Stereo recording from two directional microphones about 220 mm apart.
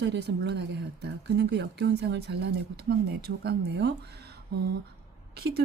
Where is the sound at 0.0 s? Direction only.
50° right (ahead or behind).